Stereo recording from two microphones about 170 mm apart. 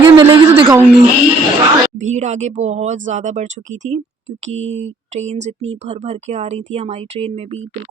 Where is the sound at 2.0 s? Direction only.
45° right (ahead or behind).